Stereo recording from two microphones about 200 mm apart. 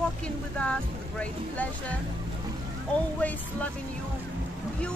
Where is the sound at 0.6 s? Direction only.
5° left (ahead or behind).